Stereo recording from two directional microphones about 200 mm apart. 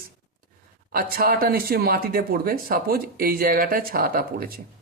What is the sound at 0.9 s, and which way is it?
Speech, 45° right (ahead or behind).